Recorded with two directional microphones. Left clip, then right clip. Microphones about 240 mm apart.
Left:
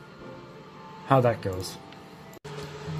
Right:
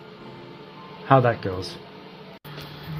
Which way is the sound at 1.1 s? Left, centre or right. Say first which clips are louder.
Right 4 dB; centre.